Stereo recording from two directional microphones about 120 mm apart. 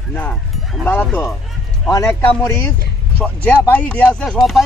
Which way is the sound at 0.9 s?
15° left (ahead or behind).